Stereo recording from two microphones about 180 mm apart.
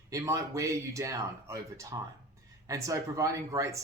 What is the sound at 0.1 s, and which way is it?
Speech, 15° right (ahead or behind).